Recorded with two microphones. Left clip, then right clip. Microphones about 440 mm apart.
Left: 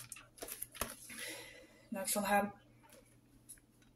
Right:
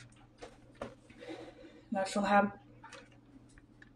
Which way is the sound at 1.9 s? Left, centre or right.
Left.